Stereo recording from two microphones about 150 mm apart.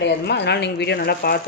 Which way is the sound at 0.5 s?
90° left.